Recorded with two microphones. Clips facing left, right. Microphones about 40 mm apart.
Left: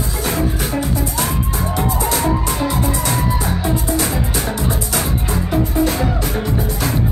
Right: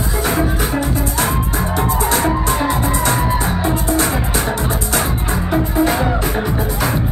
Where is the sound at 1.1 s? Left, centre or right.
Right.